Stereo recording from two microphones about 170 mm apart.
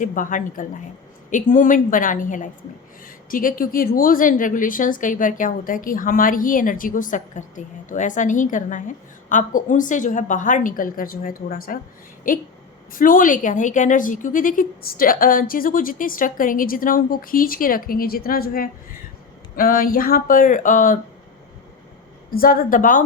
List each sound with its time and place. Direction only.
0.0 s a woman's voice: 50° left (ahead or behind)
22.3 s a woman's voice: 60° left (ahead or behind)